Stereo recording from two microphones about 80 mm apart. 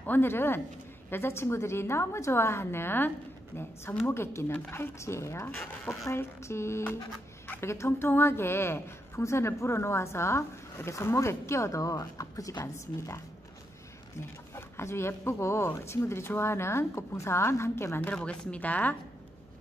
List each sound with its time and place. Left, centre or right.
0.0 s a woman's voice: left
4.1 s a woman's voice: left
7.4 s a sound: left
7.7 s a woman's voice: left
14.2 s a woman's voice: left
18.1 s speech: centre